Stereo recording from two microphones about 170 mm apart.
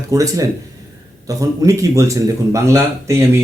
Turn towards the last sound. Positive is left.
turn(degrees=-20)  # may be behind; listen again after turning